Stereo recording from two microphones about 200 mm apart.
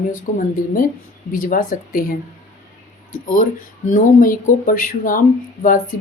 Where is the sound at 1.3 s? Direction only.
45° left (ahead or behind).